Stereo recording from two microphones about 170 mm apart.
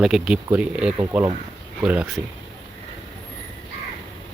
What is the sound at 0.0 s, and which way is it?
Speech, centre (ahead or behind).